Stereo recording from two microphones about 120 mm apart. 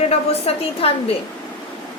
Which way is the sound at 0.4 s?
55° left (ahead or behind).